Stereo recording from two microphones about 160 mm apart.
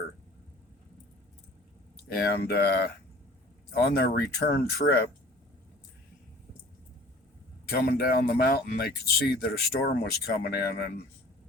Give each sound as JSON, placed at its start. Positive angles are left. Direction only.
{"t": 2.1, "sound": "speech", "side_deg": 75}
{"t": 3.8, "sound": "speech", "side_deg": 75}
{"t": 7.7, "sound": "speech", "side_deg": 75}